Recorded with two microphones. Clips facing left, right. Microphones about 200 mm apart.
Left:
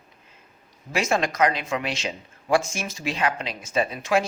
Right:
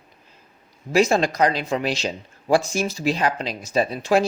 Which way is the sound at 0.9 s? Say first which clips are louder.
Right 6 dB; 35° right (ahead or behind).